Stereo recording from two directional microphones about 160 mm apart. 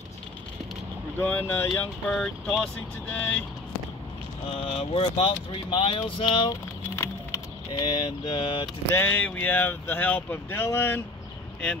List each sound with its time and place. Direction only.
1.2 s speech: 10° left (ahead or behind)
4.5 s speech: 35° left (ahead or behind)
7.7 s speech: 25° left (ahead or behind)
8.9 s speech: 10° left (ahead or behind)